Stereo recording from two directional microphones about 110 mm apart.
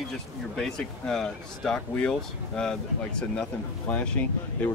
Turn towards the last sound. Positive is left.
turn(degrees=15)  # may be behind; listen again after turning